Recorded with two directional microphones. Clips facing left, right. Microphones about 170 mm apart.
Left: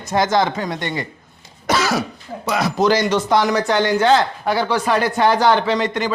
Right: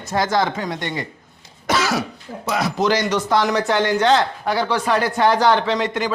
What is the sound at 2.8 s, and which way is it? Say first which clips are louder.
Speech: left 3 dB; 30° left (ahead or behind).